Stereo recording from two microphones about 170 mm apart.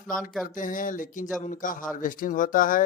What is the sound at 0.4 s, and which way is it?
Speech, 50° left (ahead or behind).